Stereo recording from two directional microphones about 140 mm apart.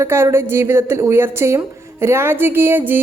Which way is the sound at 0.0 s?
20° right (ahead or behind).